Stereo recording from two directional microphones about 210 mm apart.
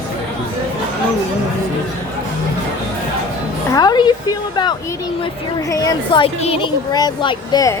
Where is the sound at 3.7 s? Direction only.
20° left (ahead or behind).